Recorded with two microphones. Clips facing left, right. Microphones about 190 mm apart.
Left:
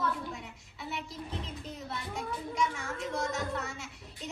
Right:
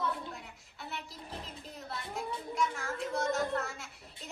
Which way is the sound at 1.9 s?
Centre (ahead or behind).